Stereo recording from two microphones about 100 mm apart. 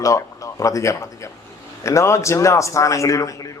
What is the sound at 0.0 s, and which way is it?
Speech, 30° left (ahead or behind).